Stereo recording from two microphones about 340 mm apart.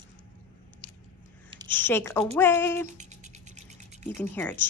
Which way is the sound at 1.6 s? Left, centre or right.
Centre.